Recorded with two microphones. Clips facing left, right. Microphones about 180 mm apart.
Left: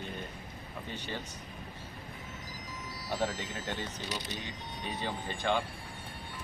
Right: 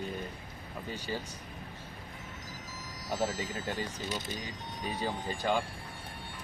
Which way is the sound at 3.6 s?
45° right (ahead or behind).